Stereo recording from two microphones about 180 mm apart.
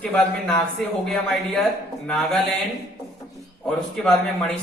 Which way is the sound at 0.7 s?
Centre (ahead or behind).